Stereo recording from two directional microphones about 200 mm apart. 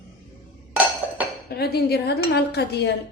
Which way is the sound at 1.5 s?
50° left (ahead or behind).